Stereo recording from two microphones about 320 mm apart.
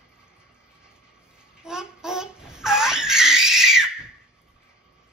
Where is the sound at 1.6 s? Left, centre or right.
Centre.